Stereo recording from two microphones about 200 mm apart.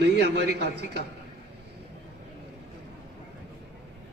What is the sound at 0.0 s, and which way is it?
Speech, 55° right (ahead or behind).